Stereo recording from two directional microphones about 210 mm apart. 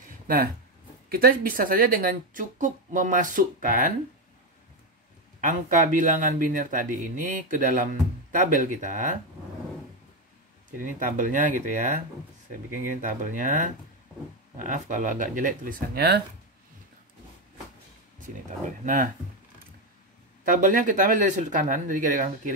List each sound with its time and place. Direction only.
1.0 s speech: 45° right (ahead or behind)
5.4 s speech: 40° right (ahead or behind)
11.0 s speech: 40° right (ahead or behind)
20.4 s speech: 40° right (ahead or behind)